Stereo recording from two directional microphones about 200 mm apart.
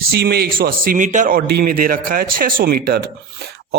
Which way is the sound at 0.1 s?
50° right (ahead or behind).